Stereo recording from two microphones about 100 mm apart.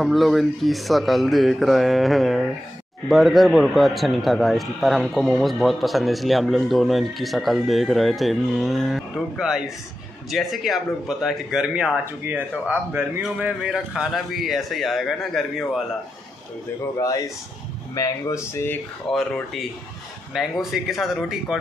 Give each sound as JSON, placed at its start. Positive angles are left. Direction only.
{"t": 0.0, "sound": "speech", "side_deg": 0}
{"t": 12.2, "sound": "speech", "side_deg": -20}
{"t": 13.6, "sound": "speech", "side_deg": -5}
{"t": 17.9, "sound": "speech", "side_deg": 35}
{"t": 20.3, "sound": "speech", "side_deg": 0}